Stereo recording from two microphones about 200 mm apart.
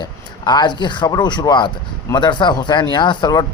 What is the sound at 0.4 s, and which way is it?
Speech, 20° left (ahead or behind).